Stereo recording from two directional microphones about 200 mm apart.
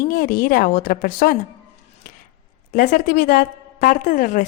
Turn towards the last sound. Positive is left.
turn(degrees=40)  # may be behind; listen again after turning